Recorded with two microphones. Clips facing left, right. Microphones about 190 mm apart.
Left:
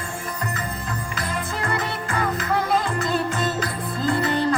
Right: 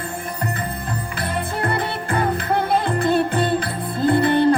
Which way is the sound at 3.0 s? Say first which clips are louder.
Right 5 dB; 60° right (ahead or behind).